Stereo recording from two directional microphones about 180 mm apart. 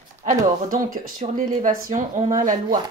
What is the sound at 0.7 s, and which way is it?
Speech, 50° right (ahead or behind).